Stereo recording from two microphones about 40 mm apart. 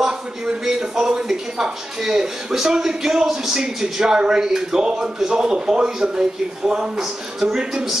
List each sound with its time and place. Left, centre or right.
0.7 s speech: centre